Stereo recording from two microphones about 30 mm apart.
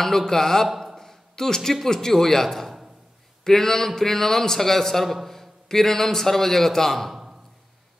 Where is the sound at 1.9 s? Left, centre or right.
Centre.